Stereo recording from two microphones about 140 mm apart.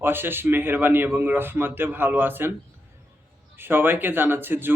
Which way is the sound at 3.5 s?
15° right (ahead or behind).